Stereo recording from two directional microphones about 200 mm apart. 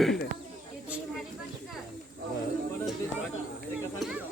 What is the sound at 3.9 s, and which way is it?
Speech, 5° right (ahead or behind).